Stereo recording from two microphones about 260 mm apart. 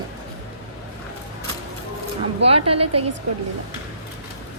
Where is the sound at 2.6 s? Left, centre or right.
Right.